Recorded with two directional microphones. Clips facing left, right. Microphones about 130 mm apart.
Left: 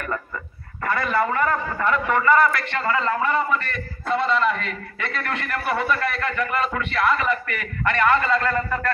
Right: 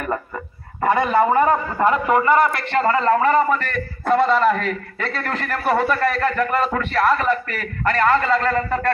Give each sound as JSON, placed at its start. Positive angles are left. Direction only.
{"t": 1.2, "sound": "a man's voice", "side_deg": -30}